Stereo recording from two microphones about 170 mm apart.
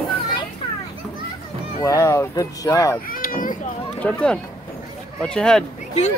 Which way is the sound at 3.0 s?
55° left (ahead or behind).